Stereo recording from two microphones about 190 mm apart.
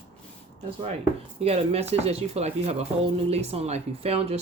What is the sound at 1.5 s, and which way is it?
Speech, 35° right (ahead or behind).